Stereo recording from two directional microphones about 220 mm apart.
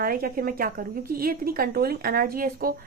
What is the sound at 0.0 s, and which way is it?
A woman's voice, 40° right (ahead or behind).